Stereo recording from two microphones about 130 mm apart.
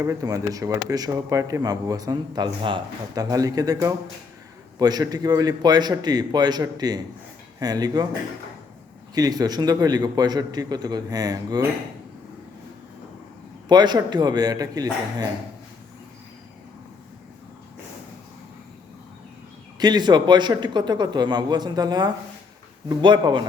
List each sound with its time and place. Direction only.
0.0 s speech: 25° right (ahead or behind)
3.2 s a man's voice: 25° right (ahead or behind)
9.1 s a man's voice: 30° right (ahead or behind)
13.7 s a man's voice: 35° right (ahead or behind)
19.8 s a man's voice: 35° right (ahead or behind)